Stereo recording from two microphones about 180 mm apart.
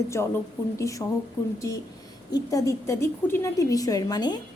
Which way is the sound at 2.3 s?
20° left (ahead or behind).